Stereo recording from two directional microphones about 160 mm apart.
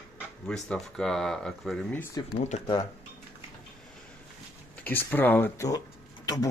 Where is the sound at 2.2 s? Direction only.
25° left (ahead or behind).